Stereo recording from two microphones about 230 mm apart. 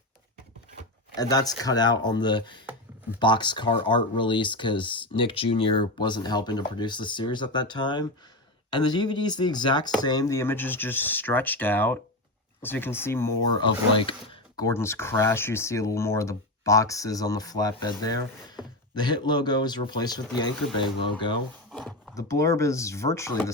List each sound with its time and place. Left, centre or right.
1.1 s speech: centre
21.7 s a sound: centre
22.1 s speech: centre